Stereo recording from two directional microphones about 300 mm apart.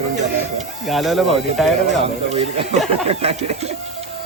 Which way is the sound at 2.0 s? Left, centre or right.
Right.